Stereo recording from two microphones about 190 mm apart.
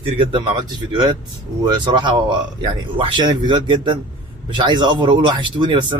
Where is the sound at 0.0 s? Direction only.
25° right (ahead or behind).